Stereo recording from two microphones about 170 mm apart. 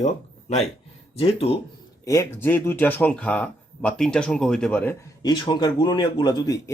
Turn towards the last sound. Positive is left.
turn(degrees=20)  # may be behind; listen again after turning